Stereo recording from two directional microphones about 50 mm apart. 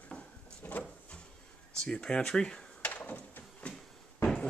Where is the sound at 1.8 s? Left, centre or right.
Centre.